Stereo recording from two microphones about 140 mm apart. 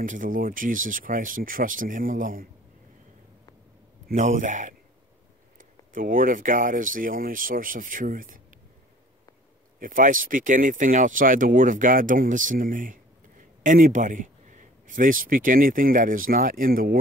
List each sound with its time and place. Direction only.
0.0 s speech: 70° right (ahead or behind)
4.1 s speech: 65° right (ahead or behind)
5.6 s speech: 80° right
9.8 s speech: 75° right (ahead or behind); by 17.0 s 90° right